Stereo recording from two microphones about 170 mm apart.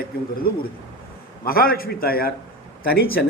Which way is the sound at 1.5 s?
60° left (ahead or behind).